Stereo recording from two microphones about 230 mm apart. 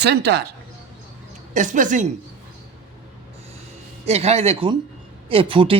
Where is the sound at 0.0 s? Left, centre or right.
Right.